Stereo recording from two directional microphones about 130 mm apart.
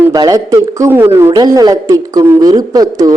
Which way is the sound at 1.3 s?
30° right (ahead or behind).